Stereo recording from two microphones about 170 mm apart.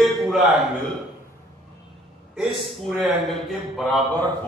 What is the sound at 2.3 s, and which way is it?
A man's voice, centre (ahead or behind).